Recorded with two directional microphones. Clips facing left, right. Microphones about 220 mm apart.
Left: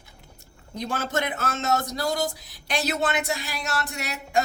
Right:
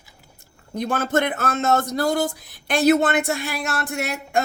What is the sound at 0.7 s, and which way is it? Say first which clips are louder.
Speech: right 6 dB; 55° right (ahead or behind).